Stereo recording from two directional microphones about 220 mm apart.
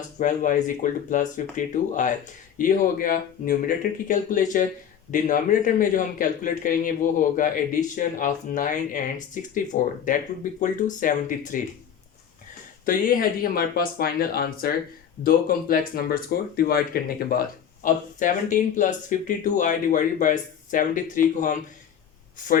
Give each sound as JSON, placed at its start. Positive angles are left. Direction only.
{"t": 0.2, "sound": "speech", "side_deg": 35}
{"t": 12.8, "sound": "speech", "side_deg": 40}